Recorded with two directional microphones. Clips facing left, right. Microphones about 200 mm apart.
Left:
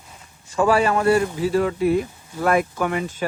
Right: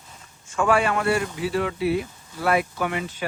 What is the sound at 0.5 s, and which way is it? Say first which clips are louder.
A man's voice: left 3 dB; 35° left (ahead or behind).